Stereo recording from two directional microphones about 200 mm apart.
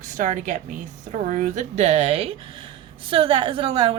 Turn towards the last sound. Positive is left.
turn(degrees=-25)  # may be behind; listen again after turning